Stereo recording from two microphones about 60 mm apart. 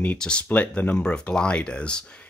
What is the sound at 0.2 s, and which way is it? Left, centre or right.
Speech, centre.